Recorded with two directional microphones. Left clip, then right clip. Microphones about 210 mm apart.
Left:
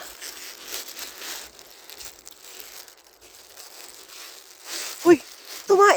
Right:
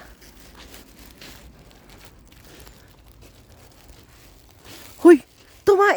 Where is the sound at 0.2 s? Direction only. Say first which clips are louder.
Left 8 dB; 45° left (ahead or behind).